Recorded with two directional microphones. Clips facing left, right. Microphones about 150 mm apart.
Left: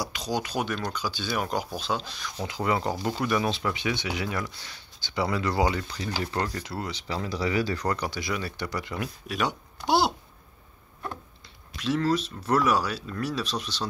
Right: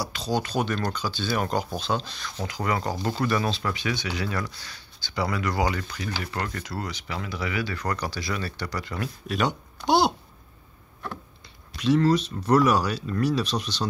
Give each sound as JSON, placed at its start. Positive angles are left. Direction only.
{"t": 0.0, "sound": "speech", "side_deg": 15}
{"t": 2.4, "sound": "speech", "side_deg": 25}
{"t": 7.8, "sound": "speech", "side_deg": 20}
{"t": 9.3, "sound": "speech", "side_deg": 5}
{"t": 11.8, "sound": "speech", "side_deg": 0}